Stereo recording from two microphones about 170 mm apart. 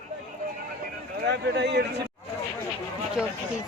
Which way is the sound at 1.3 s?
85° right.